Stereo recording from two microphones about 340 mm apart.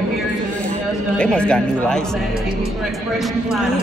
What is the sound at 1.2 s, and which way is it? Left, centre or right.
Speech, centre.